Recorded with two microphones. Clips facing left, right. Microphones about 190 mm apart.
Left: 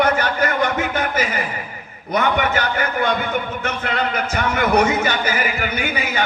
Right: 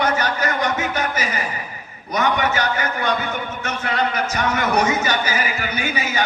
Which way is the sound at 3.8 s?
55° left (ahead or behind).